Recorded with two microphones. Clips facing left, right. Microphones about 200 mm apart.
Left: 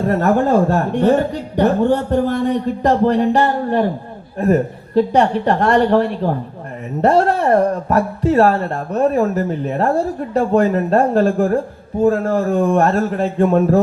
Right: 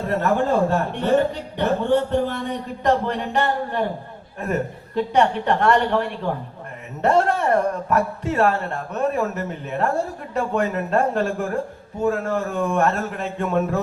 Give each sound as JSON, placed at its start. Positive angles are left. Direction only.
{"t": 0.1, "sound": "speech", "side_deg": 40}